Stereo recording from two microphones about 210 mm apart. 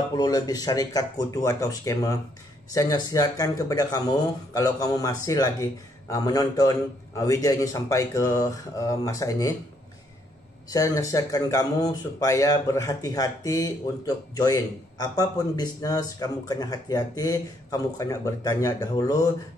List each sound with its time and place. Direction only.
0.1 s speech: 20° left (ahead or behind)
10.7 s speech: 15° left (ahead or behind)